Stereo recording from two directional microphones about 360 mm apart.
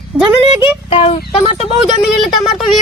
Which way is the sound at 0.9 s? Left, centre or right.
Centre.